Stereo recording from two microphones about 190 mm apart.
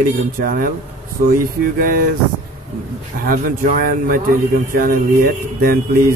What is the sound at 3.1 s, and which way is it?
Speech, 50° right (ahead or behind).